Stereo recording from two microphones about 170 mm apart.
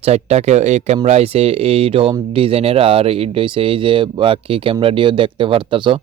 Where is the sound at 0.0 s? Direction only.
40° right (ahead or behind).